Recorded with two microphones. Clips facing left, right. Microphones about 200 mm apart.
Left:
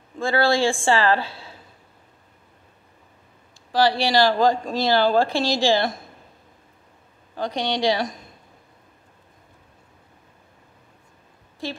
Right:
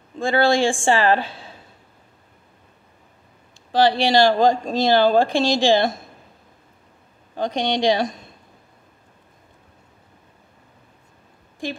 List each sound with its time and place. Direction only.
0.2 s a woman's voice: 15° right (ahead or behind)
3.7 s speech: 20° right (ahead or behind)
7.3 s speech: 20° right (ahead or behind)